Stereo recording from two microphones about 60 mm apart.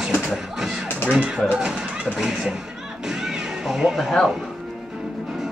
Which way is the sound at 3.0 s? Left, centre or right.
Centre.